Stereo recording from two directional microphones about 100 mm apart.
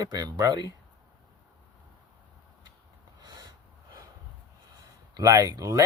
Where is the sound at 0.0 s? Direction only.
40° right (ahead or behind).